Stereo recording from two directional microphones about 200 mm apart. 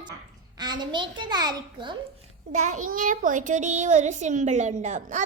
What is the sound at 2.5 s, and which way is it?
A child's voice, 35° right (ahead or behind).